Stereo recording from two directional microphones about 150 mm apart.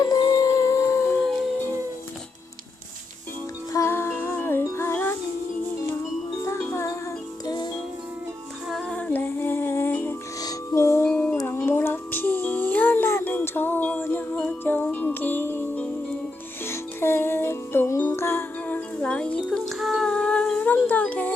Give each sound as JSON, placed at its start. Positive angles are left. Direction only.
{"t": 0.0, "sound": "humming", "side_deg": 25}
{"t": 3.7, "sound": "music", "side_deg": 20}
{"t": 6.6, "sound": "music", "side_deg": 15}
{"t": 7.4, "sound": "music", "side_deg": 30}
{"t": 8.7, "sound": "music", "side_deg": 5}
{"t": 11.1, "sound": "music", "side_deg": 5}